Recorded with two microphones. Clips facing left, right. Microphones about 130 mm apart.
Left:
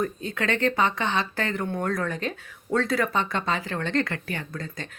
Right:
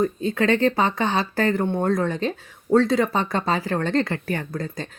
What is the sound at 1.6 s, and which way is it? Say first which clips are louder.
Speech: right 5 dB; 25° right (ahead or behind).